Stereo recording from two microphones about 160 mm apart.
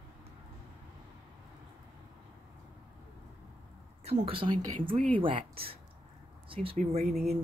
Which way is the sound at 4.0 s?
40° right (ahead or behind).